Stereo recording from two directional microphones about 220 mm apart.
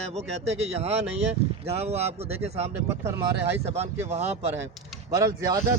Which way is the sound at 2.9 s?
10° right (ahead or behind).